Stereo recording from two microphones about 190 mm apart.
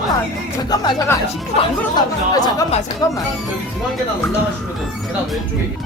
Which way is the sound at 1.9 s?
20° left (ahead or behind).